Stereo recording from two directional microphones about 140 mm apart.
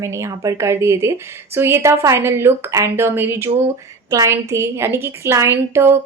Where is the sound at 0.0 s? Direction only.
20° right (ahead or behind).